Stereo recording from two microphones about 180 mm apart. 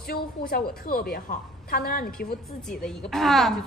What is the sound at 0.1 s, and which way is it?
A woman's voice, 55° left (ahead or behind).